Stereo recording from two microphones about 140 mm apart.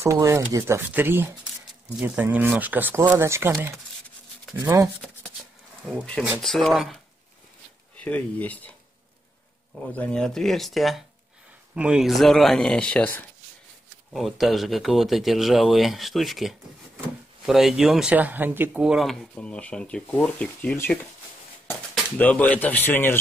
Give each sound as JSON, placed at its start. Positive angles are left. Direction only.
{"t": 0.0, "sound": "speech", "side_deg": -20}
{"t": 5.0, "sound": "shuffling cards", "side_deg": 5}
{"t": 6.4, "sound": "speech", "side_deg": 0}
{"t": 8.0, "sound": "speech", "side_deg": 10}
{"t": 9.9, "sound": "speech", "side_deg": 5}
{"t": 14.1, "sound": "speech", "side_deg": 0}
{"t": 19.3, "sound": "speech", "side_deg": 10}
{"t": 22.1, "sound": "speech", "side_deg": 10}